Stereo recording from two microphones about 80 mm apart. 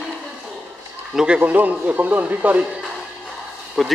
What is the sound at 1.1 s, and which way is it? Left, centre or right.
Speech, centre.